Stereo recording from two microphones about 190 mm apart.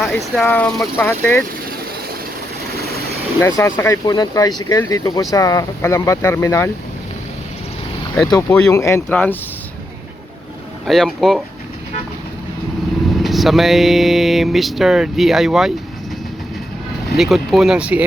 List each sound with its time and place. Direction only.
0.0 s speech: centre (ahead or behind)
3.4 s speech: 15° left (ahead or behind)
8.3 s speech: 15° left (ahead or behind)
10.8 s vehicle: centre (ahead or behind)
13.1 s vehicle: centre (ahead or behind)
17.2 s vehicle: centre (ahead or behind)